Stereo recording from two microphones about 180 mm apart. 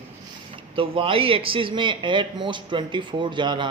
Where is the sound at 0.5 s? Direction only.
30° right (ahead or behind).